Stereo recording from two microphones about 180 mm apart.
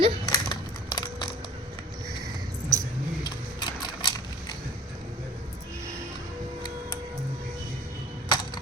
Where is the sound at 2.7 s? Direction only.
15° right (ahead or behind).